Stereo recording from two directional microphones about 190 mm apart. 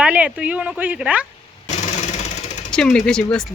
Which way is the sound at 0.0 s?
5° right (ahead or behind).